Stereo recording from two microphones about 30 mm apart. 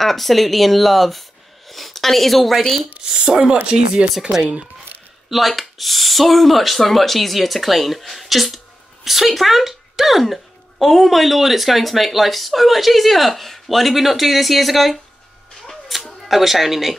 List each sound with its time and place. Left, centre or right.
0.0 s a woman's voice: centre
3.0 s speech: right
5.5 s speech: centre
15.7 s a sound: centre
16.3 s speech: centre